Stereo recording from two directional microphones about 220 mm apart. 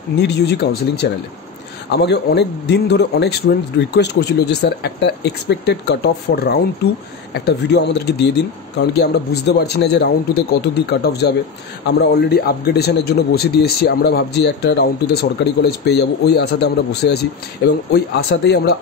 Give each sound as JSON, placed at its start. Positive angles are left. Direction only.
{"t": 0.2, "sound": "a man's voice", "side_deg": 50}